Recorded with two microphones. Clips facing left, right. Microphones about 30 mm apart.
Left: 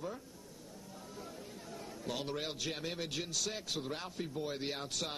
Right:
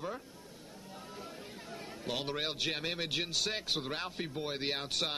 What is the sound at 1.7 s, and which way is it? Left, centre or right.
A man's voice, right.